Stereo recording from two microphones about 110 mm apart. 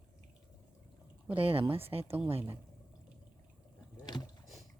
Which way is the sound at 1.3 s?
60° right (ahead or behind).